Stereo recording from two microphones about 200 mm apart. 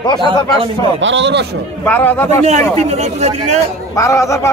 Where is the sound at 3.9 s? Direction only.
15° left (ahead or behind).